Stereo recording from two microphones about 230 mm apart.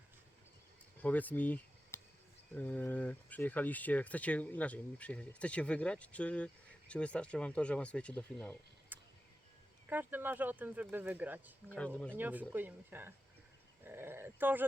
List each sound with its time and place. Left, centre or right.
1.0 s speech: centre
8.9 s a sound: centre
9.9 s speech: centre
11.7 s speech: centre
12.1 s speech: centre